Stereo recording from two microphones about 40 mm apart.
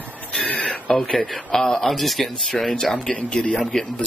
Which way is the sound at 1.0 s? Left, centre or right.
Centre.